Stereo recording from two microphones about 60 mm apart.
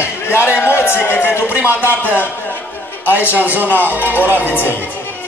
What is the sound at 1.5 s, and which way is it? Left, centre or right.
Speech, right.